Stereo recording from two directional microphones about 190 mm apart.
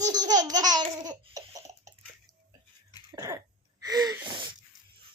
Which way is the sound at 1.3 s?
15° right (ahead or behind).